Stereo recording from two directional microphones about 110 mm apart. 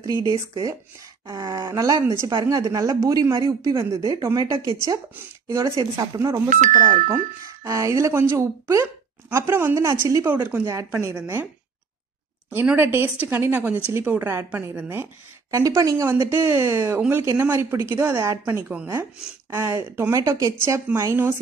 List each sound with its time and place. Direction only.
0.3 s speech: 35° right (ahead or behind)
7.6 s speech: 30° right (ahead or behind)
12.4 s a woman's voice: 15° right (ahead or behind)